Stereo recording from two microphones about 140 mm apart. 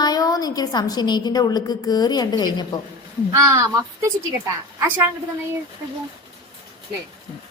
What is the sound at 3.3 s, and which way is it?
A woman's voice, 20° right (ahead or behind).